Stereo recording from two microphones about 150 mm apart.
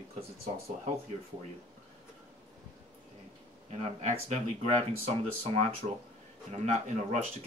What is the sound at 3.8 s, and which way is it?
Speech, 45° right (ahead or behind).